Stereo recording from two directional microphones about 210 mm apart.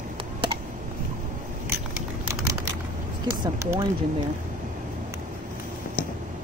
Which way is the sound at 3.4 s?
20° right (ahead or behind).